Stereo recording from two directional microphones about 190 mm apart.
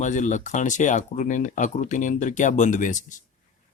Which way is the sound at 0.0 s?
40° left (ahead or behind).